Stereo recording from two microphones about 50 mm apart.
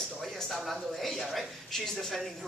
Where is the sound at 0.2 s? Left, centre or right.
Centre.